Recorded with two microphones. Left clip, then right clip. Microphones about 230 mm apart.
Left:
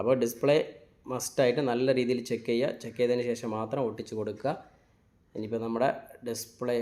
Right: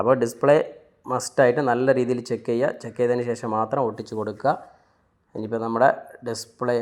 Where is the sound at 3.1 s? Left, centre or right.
Centre.